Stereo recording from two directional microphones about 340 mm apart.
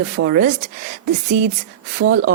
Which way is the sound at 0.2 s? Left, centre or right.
Right.